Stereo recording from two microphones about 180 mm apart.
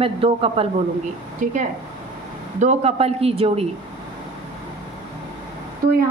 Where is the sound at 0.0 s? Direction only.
30° right (ahead or behind).